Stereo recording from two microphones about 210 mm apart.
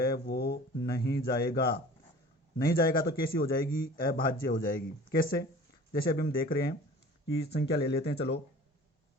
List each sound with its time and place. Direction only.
0.0 s a man's voice: 45° left (ahead or behind)